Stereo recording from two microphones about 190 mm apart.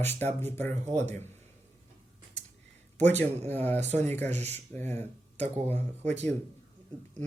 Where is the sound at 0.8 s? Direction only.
35° right (ahead or behind).